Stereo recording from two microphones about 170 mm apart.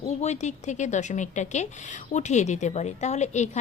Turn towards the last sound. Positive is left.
turn(degrees=40)  # may be behind; listen again after turning